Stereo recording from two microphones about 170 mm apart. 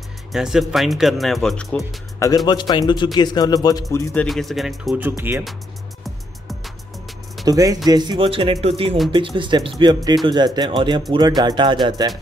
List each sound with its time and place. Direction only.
0.3 s speech: centre (ahead or behind)
2.1 s a man's voice: 20° left (ahead or behind); by 5.4 s 10° right (ahead or behind)
7.4 s speech: 20° right (ahead or behind)